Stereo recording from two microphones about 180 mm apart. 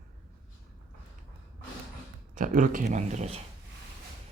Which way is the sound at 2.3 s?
45° right (ahead or behind).